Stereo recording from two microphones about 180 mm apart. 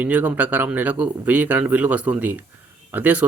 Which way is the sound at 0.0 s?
10° right (ahead or behind).